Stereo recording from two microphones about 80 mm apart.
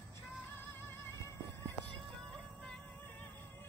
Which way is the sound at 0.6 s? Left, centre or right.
Left.